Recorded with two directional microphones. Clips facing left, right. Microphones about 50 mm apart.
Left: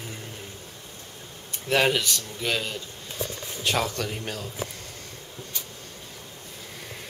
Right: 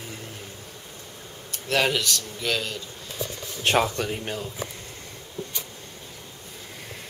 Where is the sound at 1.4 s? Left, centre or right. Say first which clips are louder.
Left 1 dB; centre.